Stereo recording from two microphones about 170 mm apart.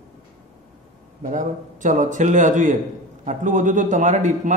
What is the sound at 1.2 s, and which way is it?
A man's voice, 50° right (ahead or behind).